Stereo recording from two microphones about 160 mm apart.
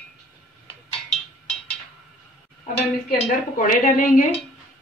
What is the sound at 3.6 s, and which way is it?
Speech, 60° left (ahead or behind).